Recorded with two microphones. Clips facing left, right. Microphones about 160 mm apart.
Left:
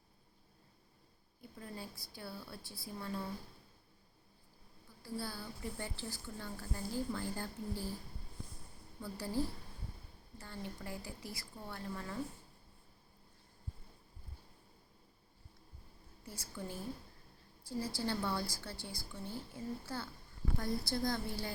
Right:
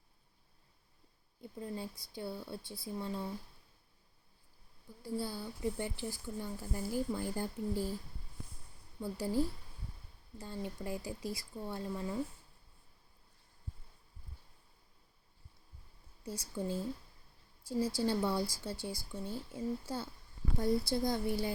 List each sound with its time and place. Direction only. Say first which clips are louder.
1.4 s a woman's voice: right 6 dB; 20° right (ahead or behind)
5.0 s a woman's voice: right 4 dB; 20° right (ahead or behind)
9.0 s a woman's voice: right 5 dB; 15° right (ahead or behind)
10.4 s a woman's voice: right 5 dB; 15° right (ahead or behind)
16.2 s a woman's voice: right 7 dB; 20° right (ahead or behind)